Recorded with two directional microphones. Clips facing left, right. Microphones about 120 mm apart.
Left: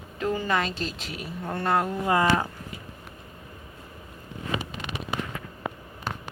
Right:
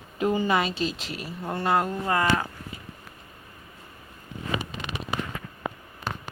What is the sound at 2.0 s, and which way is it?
Speech, 15° left (ahead or behind).